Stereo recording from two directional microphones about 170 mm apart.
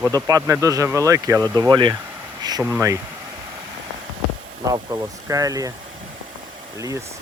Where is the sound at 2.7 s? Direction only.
15° right (ahead or behind).